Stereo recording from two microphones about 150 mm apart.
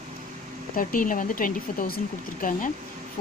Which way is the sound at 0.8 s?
65° left (ahead or behind).